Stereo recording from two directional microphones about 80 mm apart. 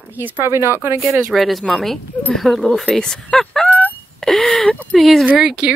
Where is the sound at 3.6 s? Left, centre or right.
Left.